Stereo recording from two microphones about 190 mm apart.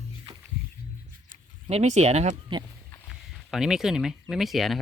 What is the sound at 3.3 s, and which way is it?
Speech, centre (ahead or behind).